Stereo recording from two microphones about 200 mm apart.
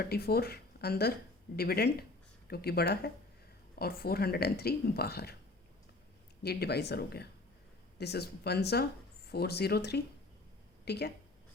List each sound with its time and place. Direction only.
0.0 s speech: 50° left (ahead or behind)
6.4 s speech: 55° left (ahead or behind)